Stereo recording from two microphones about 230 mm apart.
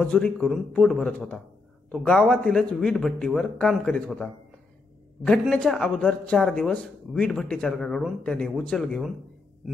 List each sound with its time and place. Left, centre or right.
0.0 s speech: centre